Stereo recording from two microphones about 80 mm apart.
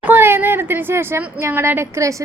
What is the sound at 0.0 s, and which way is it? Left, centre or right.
A woman's voice, right.